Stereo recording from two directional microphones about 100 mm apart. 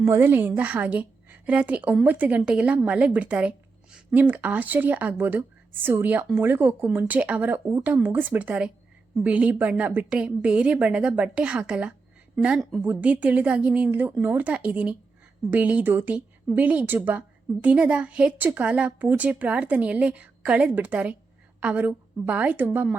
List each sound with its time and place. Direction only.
0.0 s a woman's voice: 25° right (ahead or behind); by 12.8 s 5° right (ahead or behind)
12.8 s a woman's voice: 15° right (ahead or behind)